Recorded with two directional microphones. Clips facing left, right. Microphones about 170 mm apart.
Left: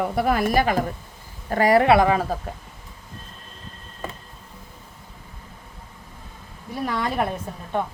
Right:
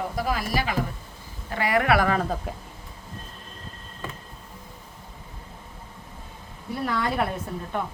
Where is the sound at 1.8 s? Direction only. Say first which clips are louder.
Left 5 dB; 25° left (ahead or behind).